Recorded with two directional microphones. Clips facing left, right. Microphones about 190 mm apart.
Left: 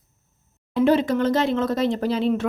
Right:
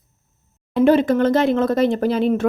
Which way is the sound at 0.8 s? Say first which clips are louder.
Right 4 dB; 55° right (ahead or behind).